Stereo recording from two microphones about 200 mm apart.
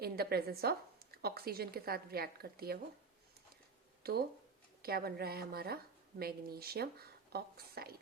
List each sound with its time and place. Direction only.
0.0 s a woman's voice: 50° right (ahead or behind)
4.0 s a woman's voice: 50° right (ahead or behind)